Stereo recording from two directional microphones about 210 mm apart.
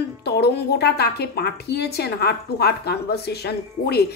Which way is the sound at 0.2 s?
50° left (ahead or behind).